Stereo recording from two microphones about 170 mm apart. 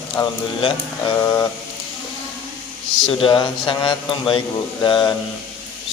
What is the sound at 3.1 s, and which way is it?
A man's voice, 30° left (ahead or behind).